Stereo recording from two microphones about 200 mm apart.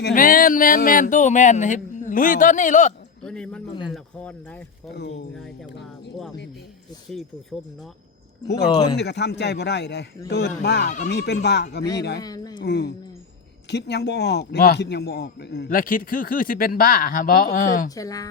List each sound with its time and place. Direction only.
0.0 s speech: 45° left (ahead or behind)
3.2 s speech: 5° left (ahead or behind)
9.0 s a man's voice: 60° left (ahead or behind)
10.8 s speech: 40° left (ahead or behind)
11.1 s a man's voice: 55° left (ahead or behind)
12.2 s speech: 20° left (ahead or behind)
12.6 s a man's voice: 55° left (ahead or behind)
17.9 s a woman's voice: 15° left (ahead or behind)